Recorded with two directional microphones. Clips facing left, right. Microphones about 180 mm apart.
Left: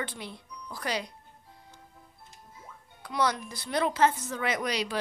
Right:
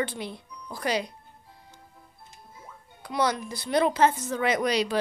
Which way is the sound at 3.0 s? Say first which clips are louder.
Right 2 dB; 15° right (ahead or behind).